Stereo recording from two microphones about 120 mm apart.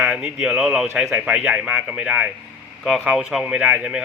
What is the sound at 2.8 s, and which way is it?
A man's voice, centre (ahead or behind).